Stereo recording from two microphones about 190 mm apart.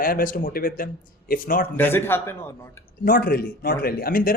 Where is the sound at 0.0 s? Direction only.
50° left (ahead or behind).